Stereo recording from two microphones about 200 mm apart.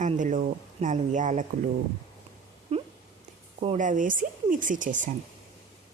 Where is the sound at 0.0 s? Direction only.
40° right (ahead or behind).